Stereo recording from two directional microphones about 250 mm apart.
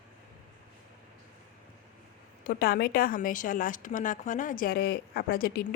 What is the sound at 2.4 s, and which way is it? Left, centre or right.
A woman's voice, left.